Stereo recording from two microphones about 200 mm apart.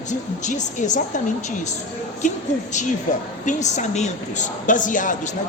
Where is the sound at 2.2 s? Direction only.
35° left (ahead or behind).